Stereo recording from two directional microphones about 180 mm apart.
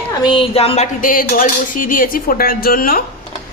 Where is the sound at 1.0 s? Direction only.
50° left (ahead or behind).